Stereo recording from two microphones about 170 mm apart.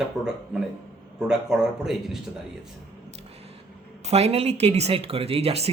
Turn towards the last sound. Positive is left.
turn(degrees=-35)  # may be behind; listen again after turning